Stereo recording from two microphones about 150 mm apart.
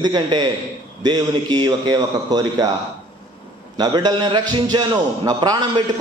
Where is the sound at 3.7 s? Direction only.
30° right (ahead or behind).